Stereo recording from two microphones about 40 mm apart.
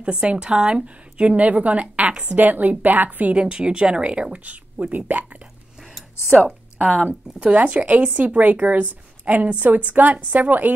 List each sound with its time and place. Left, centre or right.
0.0 s a woman's voice: right
3.3 s speech: right
4.9 s a woman's voice: right
6.4 s a woman's voice: right
10.1 s a woman's voice: right